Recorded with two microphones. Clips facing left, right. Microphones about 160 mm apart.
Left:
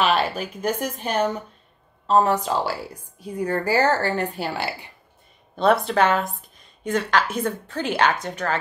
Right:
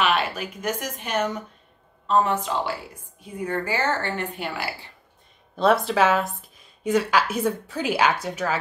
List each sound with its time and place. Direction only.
0.0 s a woman's voice: 35° left (ahead or behind)
5.6 s a woman's voice: centre (ahead or behind)